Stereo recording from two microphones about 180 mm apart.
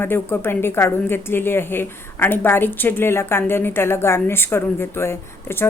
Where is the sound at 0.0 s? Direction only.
10° left (ahead or behind).